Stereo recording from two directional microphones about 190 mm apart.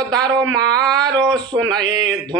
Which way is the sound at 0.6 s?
5° left (ahead or behind).